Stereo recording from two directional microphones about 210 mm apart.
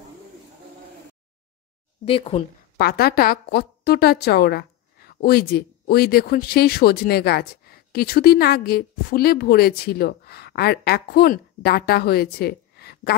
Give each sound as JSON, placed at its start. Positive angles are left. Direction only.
{"t": 2.0, "sound": "speech", "side_deg": 25}
{"t": 2.8, "sound": "a woman's voice", "side_deg": 50}